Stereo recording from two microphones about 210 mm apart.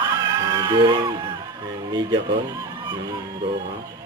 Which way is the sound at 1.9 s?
20° right (ahead or behind).